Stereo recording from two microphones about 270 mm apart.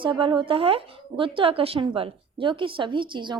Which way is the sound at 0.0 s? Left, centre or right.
Centre.